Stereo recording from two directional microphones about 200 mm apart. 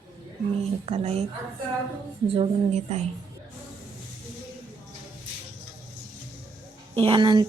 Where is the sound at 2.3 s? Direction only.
35° right (ahead or behind).